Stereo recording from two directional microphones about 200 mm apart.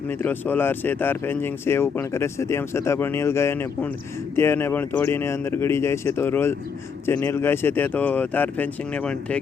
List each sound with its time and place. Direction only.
0.1 s speech: 10° left (ahead or behind)